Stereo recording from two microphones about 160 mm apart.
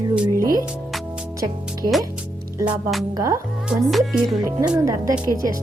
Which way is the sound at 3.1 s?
20° right (ahead or behind).